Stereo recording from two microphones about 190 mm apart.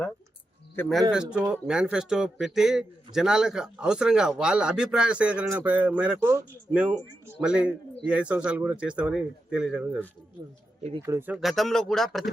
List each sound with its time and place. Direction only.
0.8 s a man's voice: centre (ahead or behind)
11.0 s a man's voice: 15° right (ahead or behind)